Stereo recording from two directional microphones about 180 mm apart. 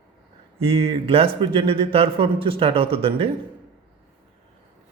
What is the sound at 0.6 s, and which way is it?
Speech, 30° right (ahead or behind).